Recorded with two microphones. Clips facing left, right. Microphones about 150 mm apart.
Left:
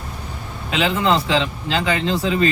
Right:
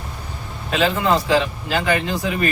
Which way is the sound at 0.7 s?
20° left (ahead or behind).